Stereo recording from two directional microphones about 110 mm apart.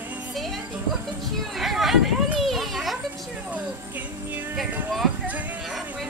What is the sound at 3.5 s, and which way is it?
Music, 15° right (ahead or behind).